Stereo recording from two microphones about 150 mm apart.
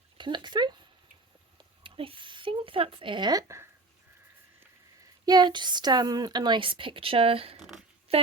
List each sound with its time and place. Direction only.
0.2 s a sound: 30° right (ahead or behind)
5.2 s a woman's voice: 25° right (ahead or behind)
7.6 s speech: 5° right (ahead or behind)